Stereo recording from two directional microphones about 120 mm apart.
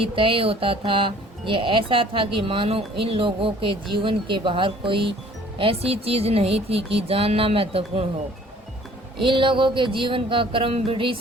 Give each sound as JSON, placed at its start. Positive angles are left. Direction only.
{"t": 0.0, "sound": "speech", "side_deg": -50}
{"t": 9.1, "sound": "speech", "side_deg": -45}